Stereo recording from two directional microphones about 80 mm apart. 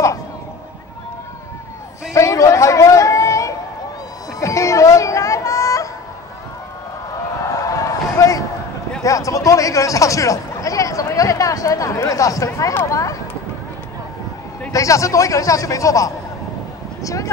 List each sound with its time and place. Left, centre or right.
2.1 s chatter: left
4.4 s music: left
7.4 s a sound: left
12.5 s a man's voice: left
14.7 s a man's voice: left